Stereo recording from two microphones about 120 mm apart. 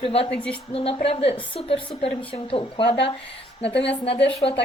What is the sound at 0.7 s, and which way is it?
Speech, 55° left (ahead or behind).